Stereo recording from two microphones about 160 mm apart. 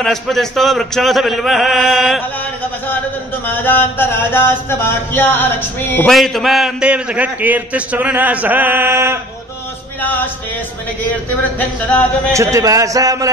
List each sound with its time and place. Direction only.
0.0 s a man's voice: centre (ahead or behind)
3.4 s mantra: 10° left (ahead or behind)
6.0 s a man's voice: centre (ahead or behind); by 9.2 s 15° right (ahead or behind)
10.0 s mantra: 10° left (ahead or behind)
12.3 s a man's voice: 20° right (ahead or behind)